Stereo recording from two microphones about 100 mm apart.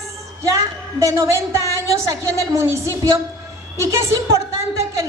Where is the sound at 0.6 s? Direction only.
30° right (ahead or behind).